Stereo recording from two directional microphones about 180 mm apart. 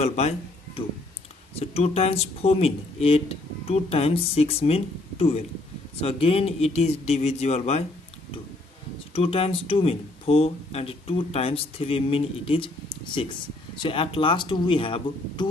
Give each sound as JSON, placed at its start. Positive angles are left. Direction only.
{"t": 0.0, "sound": "speech", "side_deg": 35}
{"t": 9.1, "sound": "speech", "side_deg": 30}